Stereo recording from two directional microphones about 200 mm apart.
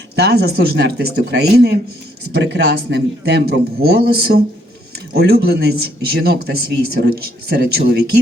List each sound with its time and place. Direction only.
0.2 s speech: 50° right (ahead or behind)